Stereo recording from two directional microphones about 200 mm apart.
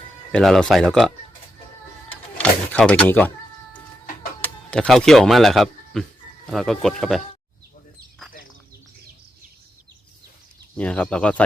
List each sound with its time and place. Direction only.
0.3 s speech: centre (ahead or behind)
2.0 s music: 5° left (ahead or behind)
4.4 s speech: 5° left (ahead or behind)
10.8 s speech: 5° left (ahead or behind)